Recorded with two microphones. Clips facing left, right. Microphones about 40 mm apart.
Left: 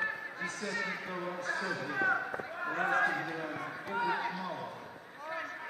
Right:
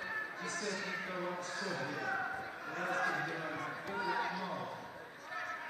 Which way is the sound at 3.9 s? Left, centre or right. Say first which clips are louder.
Left 4 dB; left.